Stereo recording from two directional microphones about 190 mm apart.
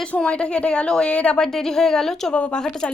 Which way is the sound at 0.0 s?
5° left (ahead or behind).